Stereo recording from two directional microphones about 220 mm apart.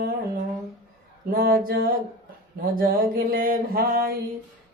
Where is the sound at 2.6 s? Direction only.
40° right (ahead or behind).